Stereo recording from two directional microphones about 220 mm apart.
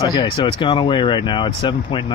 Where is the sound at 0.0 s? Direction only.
20° left (ahead or behind).